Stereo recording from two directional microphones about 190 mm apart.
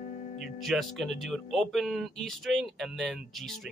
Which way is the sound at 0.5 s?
Centre (ahead or behind).